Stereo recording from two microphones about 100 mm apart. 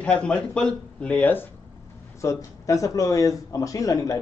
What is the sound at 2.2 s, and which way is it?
Speech, 35° left (ahead or behind).